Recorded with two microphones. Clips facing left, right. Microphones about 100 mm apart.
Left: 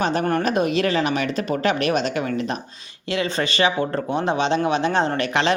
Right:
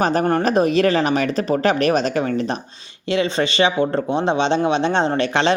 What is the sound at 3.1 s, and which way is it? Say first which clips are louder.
Speech: right 4 dB; 25° right (ahead or behind).